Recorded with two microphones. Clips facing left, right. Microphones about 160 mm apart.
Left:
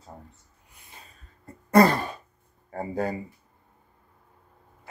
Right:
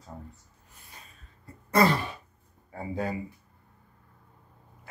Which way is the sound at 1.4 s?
45° left (ahead or behind).